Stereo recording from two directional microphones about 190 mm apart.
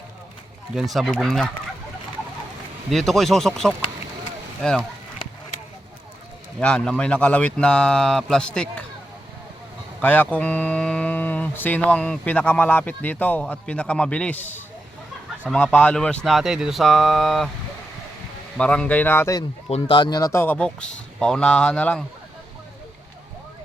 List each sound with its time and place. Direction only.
0.8 s speech: centre (ahead or behind)
2.9 s speech: centre (ahead or behind)
6.6 s speech: 5° left (ahead or behind)
10.0 s speech: 10° left (ahead or behind)
15.4 s speech: 5° left (ahead or behind)
18.5 s speech: 5° left (ahead or behind)